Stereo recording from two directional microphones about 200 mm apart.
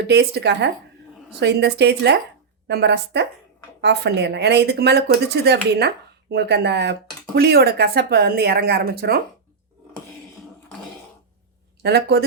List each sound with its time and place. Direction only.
0.0 s a woman's voice: 55° right (ahead or behind)
11.8 s speech: 55° right (ahead or behind)